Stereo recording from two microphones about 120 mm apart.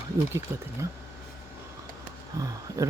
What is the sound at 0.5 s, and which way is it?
Speech, 20° right (ahead or behind).